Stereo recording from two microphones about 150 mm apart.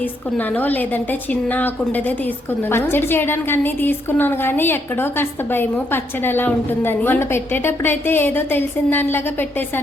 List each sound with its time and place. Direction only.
0.0 s a woman's voice: 10° left (ahead or behind)